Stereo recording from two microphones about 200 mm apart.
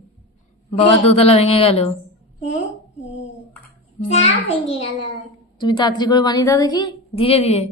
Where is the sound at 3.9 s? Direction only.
35° left (ahead or behind).